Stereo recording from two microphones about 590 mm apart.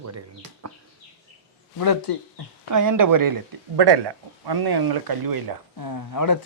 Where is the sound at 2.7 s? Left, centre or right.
Right.